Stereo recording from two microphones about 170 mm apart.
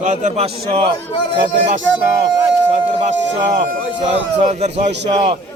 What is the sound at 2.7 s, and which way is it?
A man's voice, 45° right (ahead or behind).